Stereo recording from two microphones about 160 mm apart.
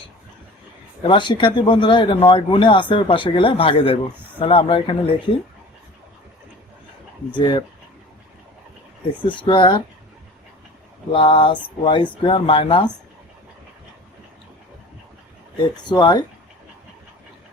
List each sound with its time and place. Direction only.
1.0 s speech: 30° left (ahead or behind)
7.3 s speech: 30° left (ahead or behind)
9.2 s speech: 30° left (ahead or behind)
11.1 s speech: 35° left (ahead or behind)
15.9 s speech: 25° left (ahead or behind)